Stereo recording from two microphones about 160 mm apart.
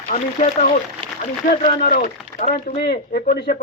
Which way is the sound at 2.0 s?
55° left (ahead or behind).